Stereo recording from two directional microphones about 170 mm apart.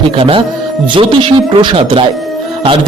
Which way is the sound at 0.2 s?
30° right (ahead or behind).